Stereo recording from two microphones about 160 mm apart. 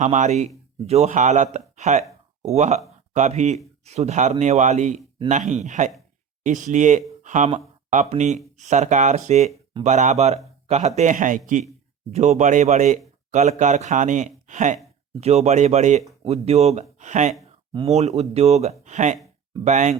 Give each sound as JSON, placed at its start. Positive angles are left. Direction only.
{"t": 0.0, "sound": "speech", "side_deg": -50}